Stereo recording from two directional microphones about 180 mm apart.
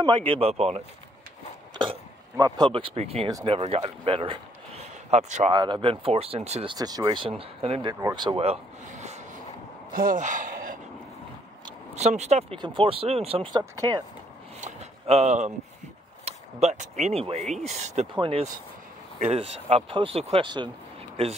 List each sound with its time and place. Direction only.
0.0 s speech: 30° right (ahead or behind)
1.8 s speech: 25° right (ahead or behind)
3.3 s speech: 20° right (ahead or behind)
3.5 s speech: 35° right (ahead or behind)
5.5 s speech: 25° right (ahead or behind)
7.9 s a sound: 20° right (ahead or behind); by 9.4 s 40° right (ahead or behind)
9.9 s speech: 50° right (ahead or behind)
11.9 s speech: 40° right (ahead or behind); by 14.0 s 20° right (ahead or behind)
14.6 s a sound: 35° right (ahead or behind)
16.3 s speech: 35° right (ahead or behind)
18.1 s speech: 25° right (ahead or behind)